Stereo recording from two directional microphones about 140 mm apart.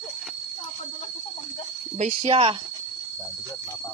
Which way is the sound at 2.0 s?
50° right (ahead or behind).